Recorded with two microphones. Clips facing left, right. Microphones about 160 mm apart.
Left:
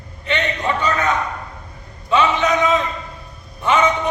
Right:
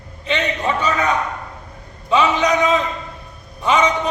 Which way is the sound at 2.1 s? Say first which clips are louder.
Right 1 dB; 15° right (ahead or behind).